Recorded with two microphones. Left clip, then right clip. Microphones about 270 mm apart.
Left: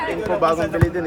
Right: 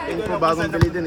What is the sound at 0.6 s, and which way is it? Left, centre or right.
Speech, centre.